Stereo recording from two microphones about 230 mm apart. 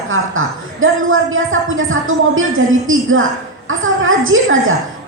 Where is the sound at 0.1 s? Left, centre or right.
Right.